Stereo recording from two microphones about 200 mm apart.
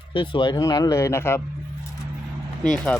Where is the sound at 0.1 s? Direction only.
25° left (ahead or behind).